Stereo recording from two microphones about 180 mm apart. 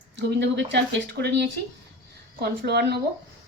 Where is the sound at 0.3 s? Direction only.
75° right (ahead or behind).